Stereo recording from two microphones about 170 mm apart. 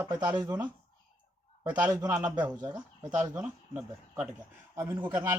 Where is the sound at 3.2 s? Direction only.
20° right (ahead or behind).